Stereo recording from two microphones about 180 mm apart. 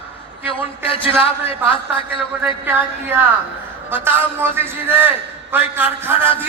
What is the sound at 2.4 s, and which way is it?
A man's voice, 10° right (ahead or behind).